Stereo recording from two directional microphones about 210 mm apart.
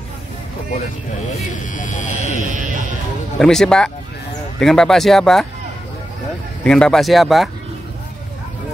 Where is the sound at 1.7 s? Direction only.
35° left (ahead or behind).